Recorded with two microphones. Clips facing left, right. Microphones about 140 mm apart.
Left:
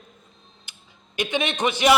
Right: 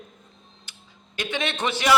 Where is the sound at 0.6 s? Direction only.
15° left (ahead or behind).